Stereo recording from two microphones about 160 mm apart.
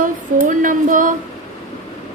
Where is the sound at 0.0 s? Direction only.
55° right (ahead or behind).